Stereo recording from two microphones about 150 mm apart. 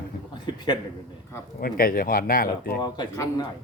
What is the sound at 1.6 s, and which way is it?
Speech, 75° left (ahead or behind).